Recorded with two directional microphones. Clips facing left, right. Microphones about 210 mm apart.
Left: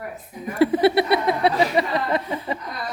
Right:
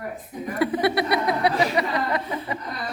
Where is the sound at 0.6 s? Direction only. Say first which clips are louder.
Left 5 dB; 25° left (ahead or behind).